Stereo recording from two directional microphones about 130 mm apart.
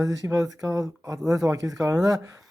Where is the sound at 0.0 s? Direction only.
25° right (ahead or behind).